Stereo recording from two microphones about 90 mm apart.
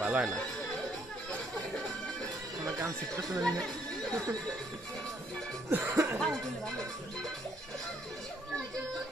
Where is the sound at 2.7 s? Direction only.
35° right (ahead or behind).